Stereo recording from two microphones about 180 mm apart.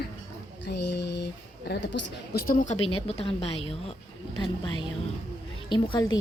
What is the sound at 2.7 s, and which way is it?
A woman's voice, 35° left (ahead or behind).